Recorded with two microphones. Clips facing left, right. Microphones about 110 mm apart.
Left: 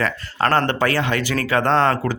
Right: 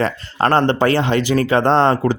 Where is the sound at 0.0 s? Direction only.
25° right (ahead or behind).